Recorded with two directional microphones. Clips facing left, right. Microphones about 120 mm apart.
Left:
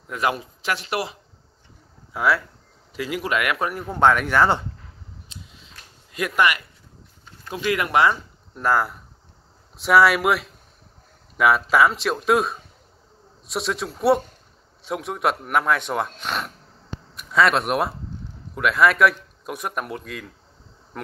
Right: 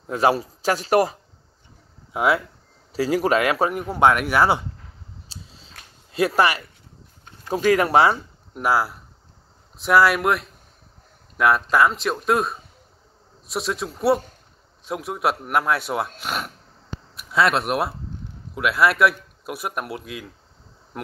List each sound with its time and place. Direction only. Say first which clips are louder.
0.0 s a man's voice: right 5 dB; 30° right (ahead or behind)
2.1 s speech: right 1 dB; 20° right (ahead or behind)
2.9 s a man's voice: right 6 dB; 35° right (ahead or behind)
3.8 s speech: left 1 dB; 10° right (ahead or behind)
5.3 s a sound: right 1 dB; 30° right (ahead or behind)
6.1 s a man's voice: right 2 dB; 30° right (ahead or behind)
8.5 s speech: even; 10° right (ahead or behind)